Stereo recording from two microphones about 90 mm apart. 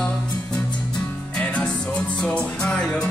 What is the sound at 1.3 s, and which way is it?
Music, 15° left (ahead or behind).